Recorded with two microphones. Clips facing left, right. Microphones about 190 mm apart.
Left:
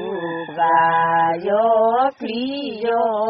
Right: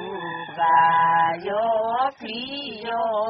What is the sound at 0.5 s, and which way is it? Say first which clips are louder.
Mantra: left 2 dB; 60° left (ahead or behind).